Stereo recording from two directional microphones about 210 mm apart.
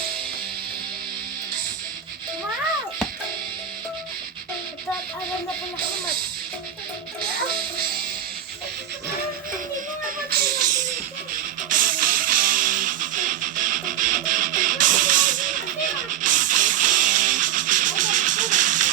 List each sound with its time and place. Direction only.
7.8 s music: 45° right (ahead or behind)
10.2 s music: 45° right (ahead or behind)
11.7 s music: 40° right (ahead or behind)